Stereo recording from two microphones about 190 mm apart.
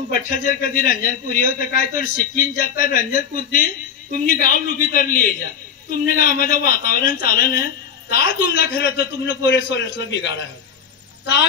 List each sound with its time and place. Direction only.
0.1 s a man's voice: 45° left (ahead or behind); by 10.3 s 65° left (ahead or behind)